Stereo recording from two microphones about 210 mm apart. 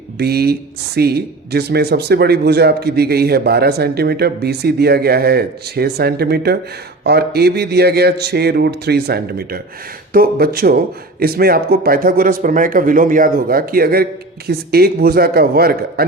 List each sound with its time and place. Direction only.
0.2 s a man's voice: 50° right (ahead or behind)